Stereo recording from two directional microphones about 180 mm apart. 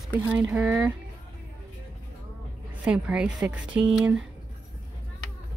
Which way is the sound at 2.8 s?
5° right (ahead or behind).